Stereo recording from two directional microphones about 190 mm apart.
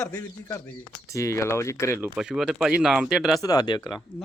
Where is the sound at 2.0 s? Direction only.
5° right (ahead or behind).